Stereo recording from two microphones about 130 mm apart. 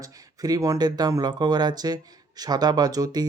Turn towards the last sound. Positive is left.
turn(degrees=-30)  # may be behind; listen again after turning